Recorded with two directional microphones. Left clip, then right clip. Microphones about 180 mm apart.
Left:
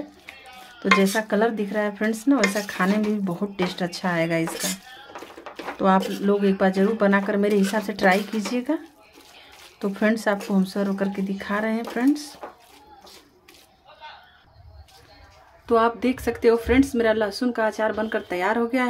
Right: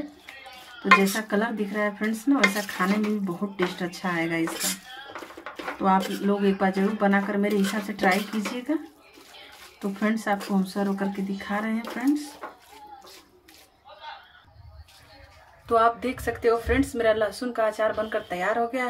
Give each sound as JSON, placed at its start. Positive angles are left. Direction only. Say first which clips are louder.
{"t": 1.3, "sound": "stir", "louder": "left 4 dB", "side_deg": 35}
{"t": 5.8, "sound": "stir", "louder": "left 3 dB", "side_deg": 35}
{"t": 9.8, "sound": "stir", "louder": "left 5 dB", "side_deg": 40}
{"t": 15.6, "sound": "speech", "louder": "left 1 dB", "side_deg": 25}